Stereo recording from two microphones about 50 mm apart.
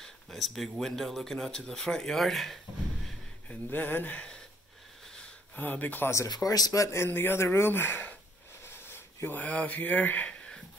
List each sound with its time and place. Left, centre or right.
0.0 s speech: centre
3.4 s speech: left
5.6 s speech: left
6.4 s speech: left
6.8 s speech: left
7.1 s speech: left
8.6 s a sound: left
9.3 s speech: left